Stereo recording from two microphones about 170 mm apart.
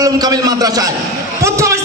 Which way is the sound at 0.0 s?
20° right (ahead or behind).